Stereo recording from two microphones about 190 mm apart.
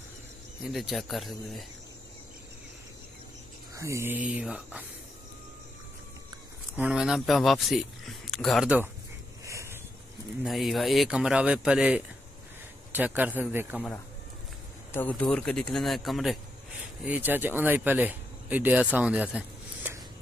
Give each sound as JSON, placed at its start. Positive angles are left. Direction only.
{"t": 0.7, "sound": "speech", "side_deg": 0}
{"t": 3.7, "sound": "speech", "side_deg": -15}
{"t": 6.8, "sound": "speech", "side_deg": -5}
{"t": 9.4, "sound": "a sound", "side_deg": -15}
{"t": 10.4, "sound": "speech", "side_deg": 0}
{"t": 14.9, "sound": "speech", "side_deg": 10}